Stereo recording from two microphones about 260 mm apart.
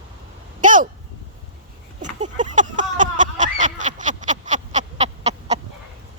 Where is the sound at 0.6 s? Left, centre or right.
Right.